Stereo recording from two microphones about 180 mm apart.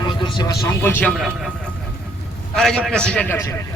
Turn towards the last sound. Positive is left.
turn(degrees=5)  # may be behind; listen again after turning